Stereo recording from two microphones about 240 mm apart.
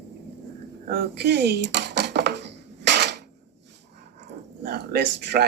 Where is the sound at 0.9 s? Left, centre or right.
Right.